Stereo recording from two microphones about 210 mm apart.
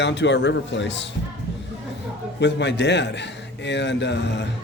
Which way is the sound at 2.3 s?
55° left (ahead or behind).